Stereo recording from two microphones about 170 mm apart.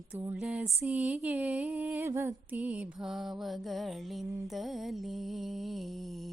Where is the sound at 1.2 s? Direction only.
10° right (ahead or behind).